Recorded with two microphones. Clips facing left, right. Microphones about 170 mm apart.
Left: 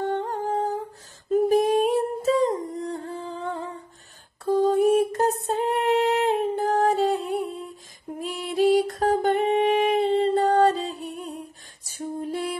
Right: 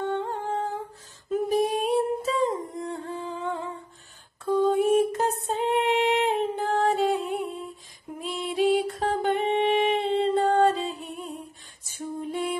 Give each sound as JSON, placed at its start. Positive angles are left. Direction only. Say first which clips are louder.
{"t": 0.0, "sound": "humming", "louder": "left 2 dB", "side_deg": 45}
{"t": 4.5, "sound": "music", "louder": "left 2 dB", "side_deg": 40}
{"t": 8.2, "sound": "humming", "louder": "left 2 dB", "side_deg": 40}
{"t": 11.8, "sound": "a sound", "louder": "left 2 dB", "side_deg": 40}